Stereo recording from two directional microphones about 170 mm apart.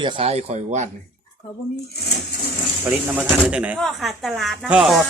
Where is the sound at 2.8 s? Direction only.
5° right (ahead or behind).